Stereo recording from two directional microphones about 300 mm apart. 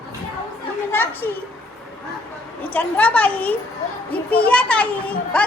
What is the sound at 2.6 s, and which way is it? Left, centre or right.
A child's voice, centre.